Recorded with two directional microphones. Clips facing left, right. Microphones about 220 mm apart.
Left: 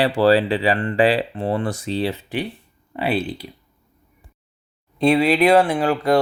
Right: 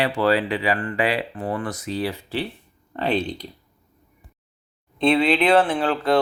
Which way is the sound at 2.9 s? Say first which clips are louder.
Left 1 dB; 10° left (ahead or behind).